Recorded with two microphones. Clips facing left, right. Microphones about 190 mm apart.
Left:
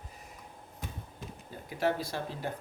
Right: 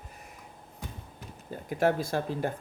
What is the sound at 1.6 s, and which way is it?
Speech, 50° right (ahead or behind).